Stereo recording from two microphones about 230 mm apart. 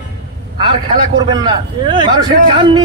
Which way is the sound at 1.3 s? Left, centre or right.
Right.